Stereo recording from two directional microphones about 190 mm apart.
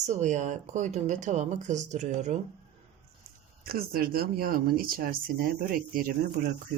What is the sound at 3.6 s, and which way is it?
Speech, 50° right (ahead or behind).